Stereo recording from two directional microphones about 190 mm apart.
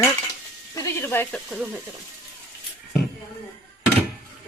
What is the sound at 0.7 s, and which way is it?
Speech, 15° left (ahead or behind).